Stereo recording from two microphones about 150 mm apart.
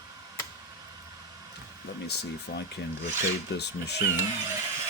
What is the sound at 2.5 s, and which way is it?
Speech, 90° left.